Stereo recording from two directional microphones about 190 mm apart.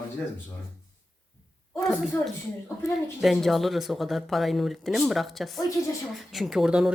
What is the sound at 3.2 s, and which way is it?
Speech, centre (ahead or behind).